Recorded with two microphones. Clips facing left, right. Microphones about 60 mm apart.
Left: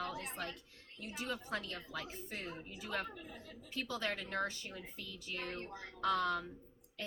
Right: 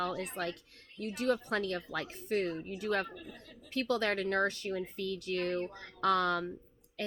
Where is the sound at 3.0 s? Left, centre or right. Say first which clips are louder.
Right 3 dB; centre.